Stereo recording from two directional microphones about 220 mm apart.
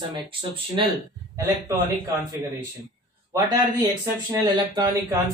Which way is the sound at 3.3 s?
15° right (ahead or behind).